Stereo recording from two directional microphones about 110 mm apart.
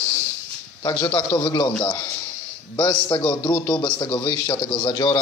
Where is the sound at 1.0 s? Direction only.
45° left (ahead or behind).